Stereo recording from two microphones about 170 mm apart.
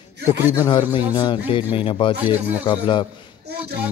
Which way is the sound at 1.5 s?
30° left (ahead or behind).